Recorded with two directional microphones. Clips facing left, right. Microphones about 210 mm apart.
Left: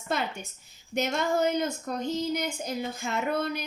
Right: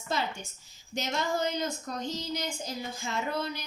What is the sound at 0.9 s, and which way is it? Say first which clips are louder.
Child singing: left 4 dB; 55° left (ahead or behind).